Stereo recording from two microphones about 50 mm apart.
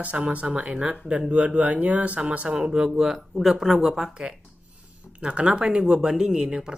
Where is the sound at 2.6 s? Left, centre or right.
Centre.